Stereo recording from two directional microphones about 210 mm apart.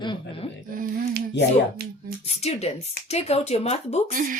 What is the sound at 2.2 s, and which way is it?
Speech, 30° left (ahead or behind).